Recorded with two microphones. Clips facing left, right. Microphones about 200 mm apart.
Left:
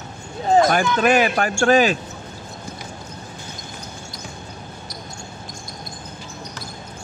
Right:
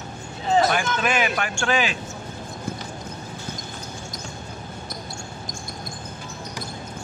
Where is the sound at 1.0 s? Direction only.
40° left (ahead or behind).